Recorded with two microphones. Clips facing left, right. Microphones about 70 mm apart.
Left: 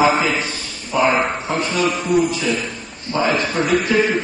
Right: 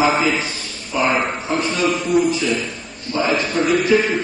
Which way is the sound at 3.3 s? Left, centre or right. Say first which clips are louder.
Even; left.